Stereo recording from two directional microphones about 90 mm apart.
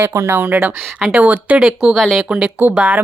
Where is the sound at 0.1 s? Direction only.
30° right (ahead or behind).